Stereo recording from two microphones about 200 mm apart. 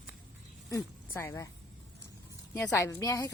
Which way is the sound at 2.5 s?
15° left (ahead or behind).